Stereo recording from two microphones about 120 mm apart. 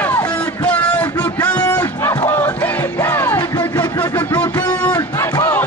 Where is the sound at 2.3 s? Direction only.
15° left (ahead or behind).